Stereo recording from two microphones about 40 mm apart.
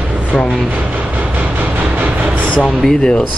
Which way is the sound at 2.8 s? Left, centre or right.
Centre.